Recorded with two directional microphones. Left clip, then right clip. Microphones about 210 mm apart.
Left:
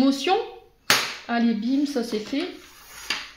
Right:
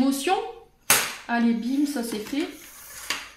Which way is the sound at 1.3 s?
35° left (ahead or behind).